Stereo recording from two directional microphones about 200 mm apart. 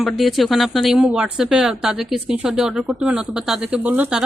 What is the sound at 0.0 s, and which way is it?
A woman's voice, centre (ahead or behind).